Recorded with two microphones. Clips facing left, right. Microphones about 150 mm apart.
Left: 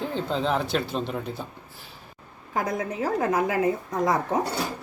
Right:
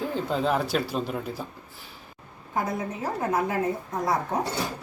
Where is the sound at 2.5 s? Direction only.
90° left.